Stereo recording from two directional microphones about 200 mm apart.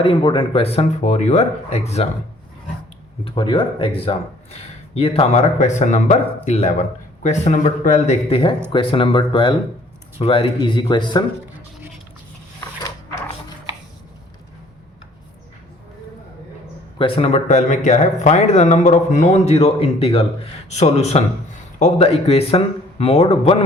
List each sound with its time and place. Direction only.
0.0 s speech: 25° left (ahead or behind)
3.2 s speech: 25° left (ahead or behind)
17.0 s speech: 30° left (ahead or behind)